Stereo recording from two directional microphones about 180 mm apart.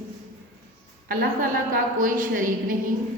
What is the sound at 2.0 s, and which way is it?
Speech, 50° right (ahead or behind).